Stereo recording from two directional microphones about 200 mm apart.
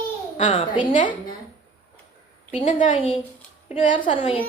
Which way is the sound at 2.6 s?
40° left (ahead or behind).